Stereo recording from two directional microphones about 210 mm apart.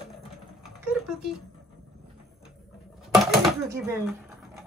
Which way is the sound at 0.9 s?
5° right (ahead or behind).